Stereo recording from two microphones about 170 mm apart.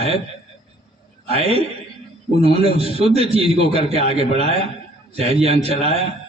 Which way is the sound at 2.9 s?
30° left (ahead or behind).